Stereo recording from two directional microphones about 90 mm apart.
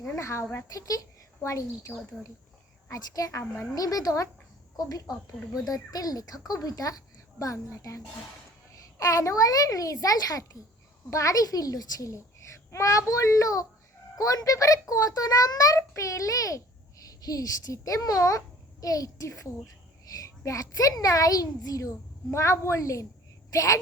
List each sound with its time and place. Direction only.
0.2 s a child's voice: 35° left (ahead or behind)
2.9 s a child's voice: 40° left (ahead or behind)